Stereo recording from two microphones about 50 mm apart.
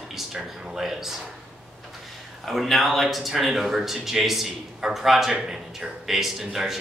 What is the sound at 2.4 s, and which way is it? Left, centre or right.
Speech, centre.